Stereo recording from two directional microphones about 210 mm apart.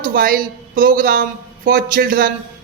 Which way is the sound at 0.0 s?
45° right (ahead or behind).